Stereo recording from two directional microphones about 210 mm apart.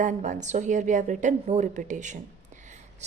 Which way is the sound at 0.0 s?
35° right (ahead or behind).